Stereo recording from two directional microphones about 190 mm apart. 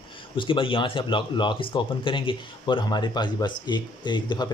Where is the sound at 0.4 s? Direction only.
25° left (ahead or behind).